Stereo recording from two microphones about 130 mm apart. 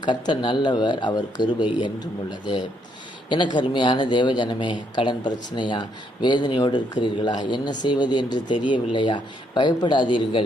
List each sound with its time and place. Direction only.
0.0 s speech: 35° left (ahead or behind)